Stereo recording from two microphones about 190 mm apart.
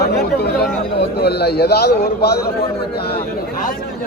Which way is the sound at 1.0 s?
60° left (ahead or behind).